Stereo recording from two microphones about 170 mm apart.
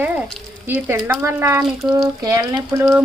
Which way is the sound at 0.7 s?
10° right (ahead or behind).